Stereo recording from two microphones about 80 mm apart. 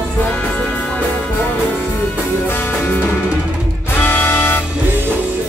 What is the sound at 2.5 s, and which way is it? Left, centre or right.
Music, left.